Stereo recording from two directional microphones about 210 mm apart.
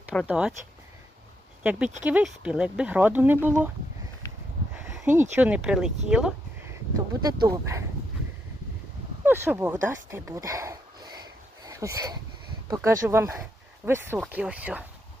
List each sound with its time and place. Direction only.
0.3 s speech: 5° right (ahead or behind)
2.0 s speech: 5° right (ahead or behind)
4.2 s a sound: 15° left (ahead or behind)
4.8 s speech: 10° right (ahead or behind)
7.1 s speech: 15° right (ahead or behind)
9.2 s speech: 10° right (ahead or behind)